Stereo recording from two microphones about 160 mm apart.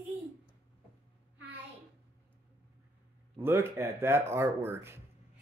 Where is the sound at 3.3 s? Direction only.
15° right (ahead or behind).